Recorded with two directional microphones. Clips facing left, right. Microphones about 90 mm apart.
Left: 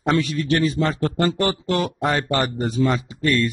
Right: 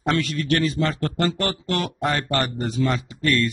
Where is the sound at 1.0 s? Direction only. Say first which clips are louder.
Left 3 dB; 15° left (ahead or behind).